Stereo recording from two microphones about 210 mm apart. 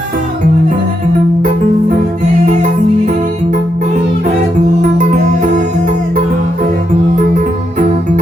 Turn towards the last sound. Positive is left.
turn(degrees=-35)  # may be behind; listen again after turning